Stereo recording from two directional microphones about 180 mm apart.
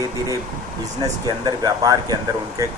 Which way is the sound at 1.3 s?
20° right (ahead or behind).